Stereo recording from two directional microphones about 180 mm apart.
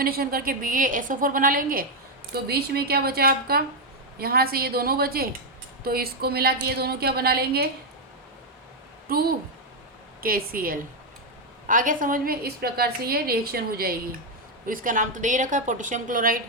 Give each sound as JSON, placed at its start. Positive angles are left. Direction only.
{"t": 0.0, "sound": "a woman's voice", "side_deg": -55}
{"t": 9.1, "sound": "a woman's voice", "side_deg": -55}